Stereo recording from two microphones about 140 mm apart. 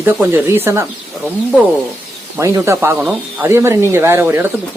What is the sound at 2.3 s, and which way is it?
Speech, 20° right (ahead or behind).